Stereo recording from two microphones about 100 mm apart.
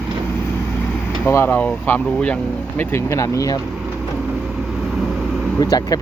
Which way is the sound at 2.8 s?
25° left (ahead or behind).